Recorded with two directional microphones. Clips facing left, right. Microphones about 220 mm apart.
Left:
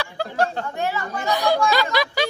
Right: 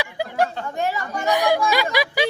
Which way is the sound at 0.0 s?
15° right (ahead or behind).